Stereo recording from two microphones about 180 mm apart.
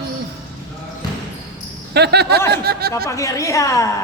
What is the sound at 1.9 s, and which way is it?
Speech, 70° right (ahead or behind).